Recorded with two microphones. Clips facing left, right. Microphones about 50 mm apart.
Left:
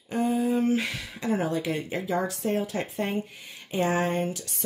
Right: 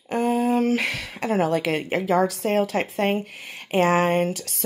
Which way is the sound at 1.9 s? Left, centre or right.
Right.